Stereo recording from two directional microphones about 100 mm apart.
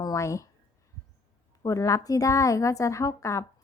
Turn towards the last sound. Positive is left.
turn(degrees=30)  # may be behind; listen again after turning